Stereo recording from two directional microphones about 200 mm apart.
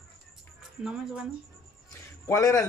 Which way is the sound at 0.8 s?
5° right (ahead or behind).